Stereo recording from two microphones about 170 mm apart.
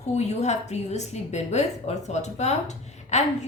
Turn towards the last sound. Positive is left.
turn(degrees=40)  # may be behind; listen again after turning